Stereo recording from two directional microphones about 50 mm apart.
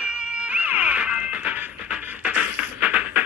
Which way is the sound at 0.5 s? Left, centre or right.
Right.